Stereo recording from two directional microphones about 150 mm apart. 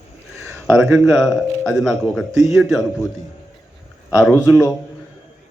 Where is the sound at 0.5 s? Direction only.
5° right (ahead or behind).